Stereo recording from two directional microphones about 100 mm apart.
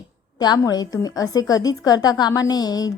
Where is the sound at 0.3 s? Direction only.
45° left (ahead or behind).